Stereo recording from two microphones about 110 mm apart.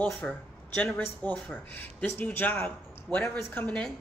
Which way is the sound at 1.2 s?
15° left (ahead or behind).